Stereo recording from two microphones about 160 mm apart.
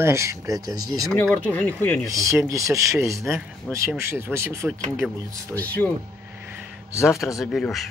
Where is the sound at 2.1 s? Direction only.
20° right (ahead or behind).